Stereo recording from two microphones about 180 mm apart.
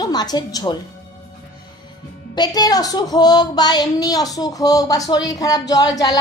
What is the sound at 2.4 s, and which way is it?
A woman's voice, 20° left (ahead or behind).